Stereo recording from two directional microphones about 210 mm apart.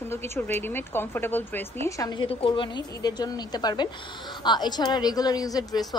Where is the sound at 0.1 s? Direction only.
10° left (ahead or behind).